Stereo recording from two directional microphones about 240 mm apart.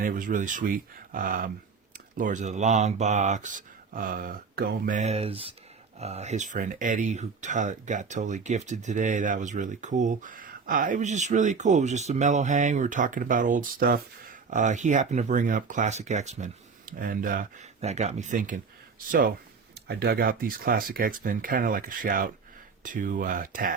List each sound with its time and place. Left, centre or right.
0.0 s speech: right
19.9 s speech: right